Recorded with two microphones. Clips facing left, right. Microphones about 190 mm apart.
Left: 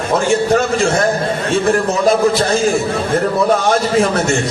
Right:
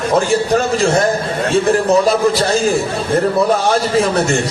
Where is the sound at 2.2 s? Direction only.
35° right (ahead or behind).